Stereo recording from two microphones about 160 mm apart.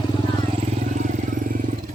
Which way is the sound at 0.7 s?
50° right (ahead or behind).